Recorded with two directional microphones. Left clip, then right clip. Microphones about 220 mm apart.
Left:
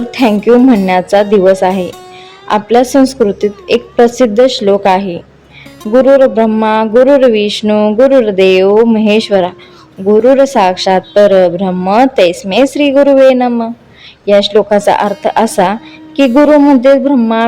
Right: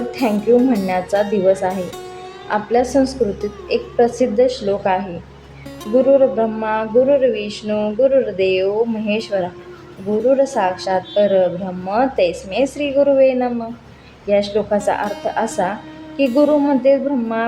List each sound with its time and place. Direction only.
0.1 s music: 35° left (ahead or behind)
0.3 s speech: centre (ahead or behind)
0.9 s a woman's voice: 35° left (ahead or behind)
1.7 s speech: centre (ahead or behind)
2.5 s a woman's voice: 35° left (ahead or behind)
6.3 s a woman's voice: 40° left (ahead or behind)